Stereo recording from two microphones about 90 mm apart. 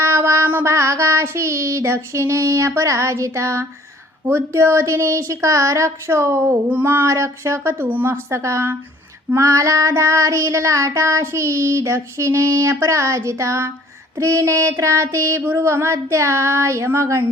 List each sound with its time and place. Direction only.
0.0 s child singing: 30° right (ahead or behind)
6.7 s speech: 20° right (ahead or behind)
9.3 s child singing: 35° right (ahead or behind)